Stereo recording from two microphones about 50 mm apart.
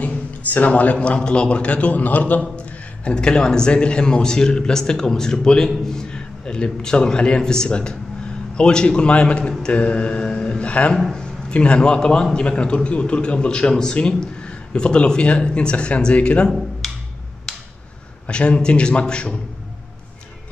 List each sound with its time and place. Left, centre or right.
0.0 s speech: left
2.5 s a man's voice: left
16.8 s music: centre
17.5 s a sound: centre
18.2 s speech: left